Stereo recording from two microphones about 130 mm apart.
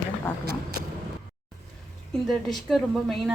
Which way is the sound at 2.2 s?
Centre (ahead or behind).